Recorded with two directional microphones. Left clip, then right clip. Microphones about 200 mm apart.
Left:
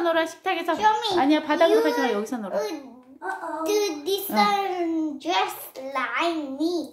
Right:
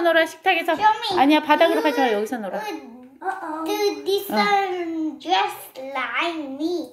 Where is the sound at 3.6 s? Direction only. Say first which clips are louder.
Right 2 dB; 65° left (ahead or behind).